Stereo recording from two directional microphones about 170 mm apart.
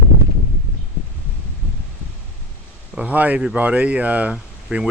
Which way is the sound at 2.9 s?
10° right (ahead or behind).